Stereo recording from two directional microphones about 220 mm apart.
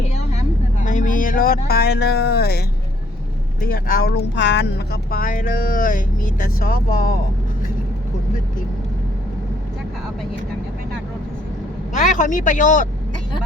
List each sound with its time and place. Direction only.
0.8 s speech: 35° left (ahead or behind)
12.1 s speech: 35° left (ahead or behind)